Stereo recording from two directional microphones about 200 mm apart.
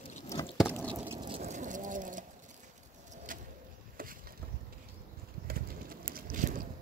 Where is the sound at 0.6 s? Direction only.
10° left (ahead or behind).